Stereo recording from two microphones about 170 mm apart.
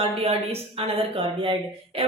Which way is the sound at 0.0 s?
35° right (ahead or behind).